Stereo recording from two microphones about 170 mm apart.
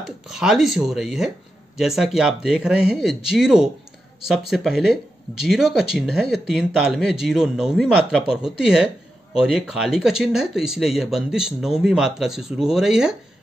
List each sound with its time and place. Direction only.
0.0 s speech: 5° right (ahead or behind)